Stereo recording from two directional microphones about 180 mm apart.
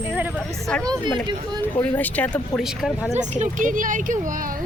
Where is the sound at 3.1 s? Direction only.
40° right (ahead or behind).